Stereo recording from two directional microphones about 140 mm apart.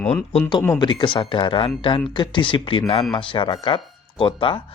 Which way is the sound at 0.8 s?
35° left (ahead or behind).